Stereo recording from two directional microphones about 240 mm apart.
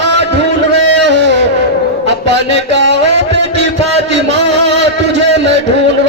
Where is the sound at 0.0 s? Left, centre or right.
Right.